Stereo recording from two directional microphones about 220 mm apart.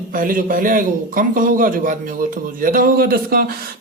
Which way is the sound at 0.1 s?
40° right (ahead or behind).